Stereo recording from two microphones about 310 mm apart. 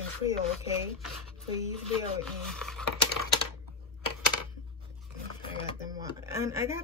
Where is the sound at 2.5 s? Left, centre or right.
Centre.